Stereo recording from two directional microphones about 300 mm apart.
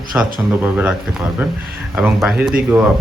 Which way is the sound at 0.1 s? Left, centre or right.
Centre.